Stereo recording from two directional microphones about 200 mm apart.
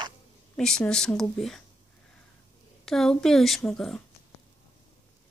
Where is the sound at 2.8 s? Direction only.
Centre (ahead or behind).